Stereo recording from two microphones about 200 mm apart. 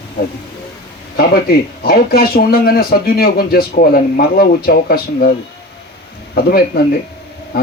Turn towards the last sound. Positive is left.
turn(degrees=50)  # may be behind; listen again after turning